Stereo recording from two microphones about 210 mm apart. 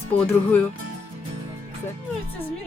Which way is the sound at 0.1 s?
5° left (ahead or behind).